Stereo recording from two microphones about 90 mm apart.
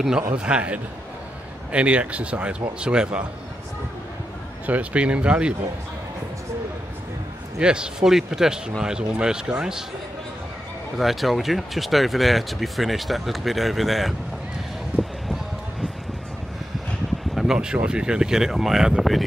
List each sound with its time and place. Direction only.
0.2 s speech: 15° right (ahead or behind)
4.6 s speech: 15° right (ahead or behind)
7.5 s speech: 10° right (ahead or behind)
11.0 s speech: centre (ahead or behind)
17.4 s speech: 5° right (ahead or behind)